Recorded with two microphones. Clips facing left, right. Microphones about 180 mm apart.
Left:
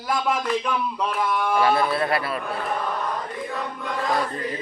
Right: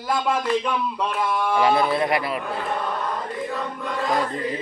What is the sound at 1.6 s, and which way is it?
Speech, 15° right (ahead or behind).